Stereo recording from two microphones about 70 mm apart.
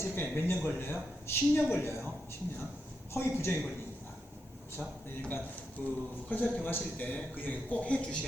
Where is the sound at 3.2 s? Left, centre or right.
Left.